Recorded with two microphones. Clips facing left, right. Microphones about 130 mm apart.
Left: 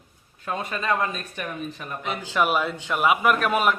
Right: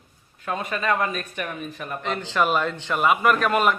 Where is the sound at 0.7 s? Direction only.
30° left (ahead or behind).